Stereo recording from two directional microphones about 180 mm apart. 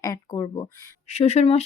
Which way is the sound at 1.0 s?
35° left (ahead or behind).